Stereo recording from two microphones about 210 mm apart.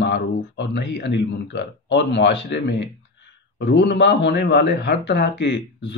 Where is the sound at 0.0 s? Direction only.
55° left (ahead or behind).